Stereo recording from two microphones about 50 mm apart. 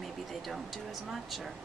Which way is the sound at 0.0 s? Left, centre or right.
Centre.